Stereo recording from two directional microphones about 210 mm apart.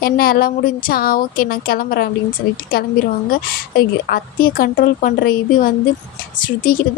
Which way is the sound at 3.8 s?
45° left (ahead or behind).